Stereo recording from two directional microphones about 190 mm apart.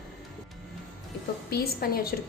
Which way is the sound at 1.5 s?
50° left (ahead or behind).